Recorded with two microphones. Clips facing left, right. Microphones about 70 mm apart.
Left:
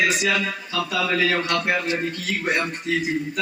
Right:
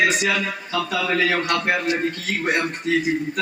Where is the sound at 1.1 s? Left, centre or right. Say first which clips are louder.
Right 2 dB; centre.